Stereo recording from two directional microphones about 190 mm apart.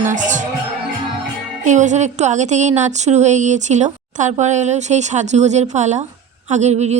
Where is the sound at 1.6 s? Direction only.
40° right (ahead or behind).